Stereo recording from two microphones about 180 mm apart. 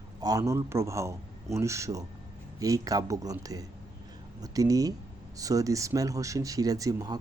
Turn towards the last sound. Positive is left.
turn(degrees=-20)  # may be behind; listen again after turning